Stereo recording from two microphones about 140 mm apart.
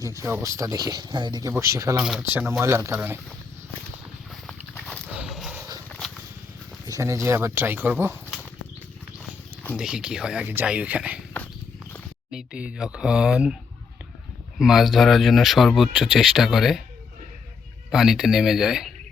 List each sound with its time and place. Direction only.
0.0 s speech: 20° right (ahead or behind)
2.0 s speech: 10° right (ahead or behind)
5.1 s horse: 5° right (ahead or behind)
6.8 s speech: 25° right (ahead or behind)
9.7 s speech: 5° right (ahead or behind)
12.3 s speech: 5° right (ahead or behind)
14.6 s speech: centre (ahead or behind)
17.9 s speech: 5° right (ahead or behind)